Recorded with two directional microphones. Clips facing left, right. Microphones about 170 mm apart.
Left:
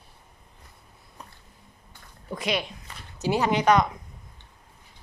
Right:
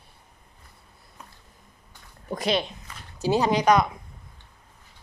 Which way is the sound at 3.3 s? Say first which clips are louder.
Right 1 dB; 15° right (ahead or behind).